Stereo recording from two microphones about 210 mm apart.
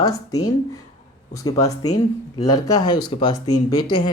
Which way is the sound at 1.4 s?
15° left (ahead or behind).